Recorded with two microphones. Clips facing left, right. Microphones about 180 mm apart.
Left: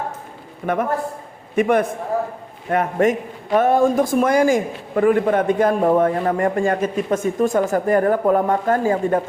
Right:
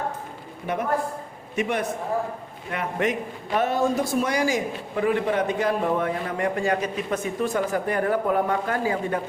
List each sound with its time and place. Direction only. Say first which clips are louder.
0.7 s a man's voice: left 4 dB; 50° left (ahead or behind)